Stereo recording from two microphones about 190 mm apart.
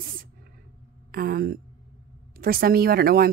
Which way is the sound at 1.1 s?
50° right (ahead or behind).